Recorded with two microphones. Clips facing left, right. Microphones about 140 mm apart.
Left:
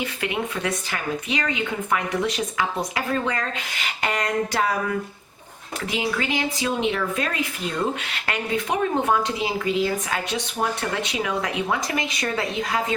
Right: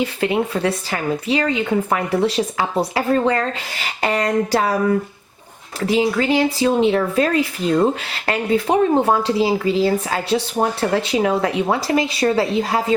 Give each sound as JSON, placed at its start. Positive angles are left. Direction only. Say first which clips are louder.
{"t": 0.0, "sound": "speech", "louder": "right 8 dB", "side_deg": -30}